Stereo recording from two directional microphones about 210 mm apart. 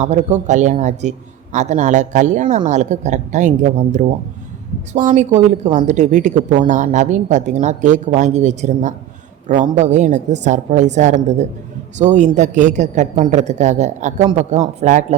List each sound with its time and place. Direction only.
0.0 s a woman's voice: 35° right (ahead or behind)